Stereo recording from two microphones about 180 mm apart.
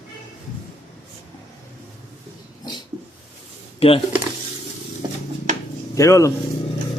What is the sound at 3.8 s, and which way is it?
Speech, 30° left (ahead or behind).